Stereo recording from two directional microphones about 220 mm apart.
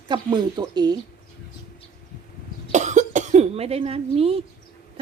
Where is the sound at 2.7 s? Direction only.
35° right (ahead or behind).